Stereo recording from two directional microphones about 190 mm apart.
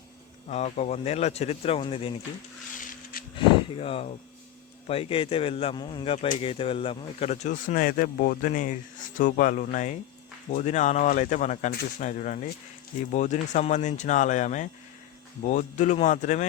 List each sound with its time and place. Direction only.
0.5 s speech: 35° left (ahead or behind)
2.7 s a sound: 45° left (ahead or behind)
3.3 s speech: 30° left (ahead or behind)